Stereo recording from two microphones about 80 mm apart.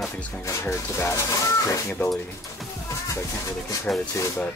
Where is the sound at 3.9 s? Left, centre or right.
Centre.